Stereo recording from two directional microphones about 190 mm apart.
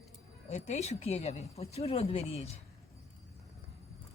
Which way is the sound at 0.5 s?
35° left (ahead or behind).